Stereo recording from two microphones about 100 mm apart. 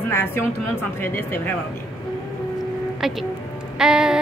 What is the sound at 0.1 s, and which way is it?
A woman's voice, 25° left (ahead or behind).